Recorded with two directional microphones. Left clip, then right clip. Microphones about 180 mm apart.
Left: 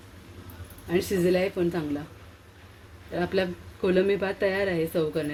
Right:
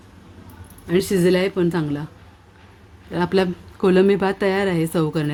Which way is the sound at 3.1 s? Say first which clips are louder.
Right 7 dB; 65° right (ahead or behind).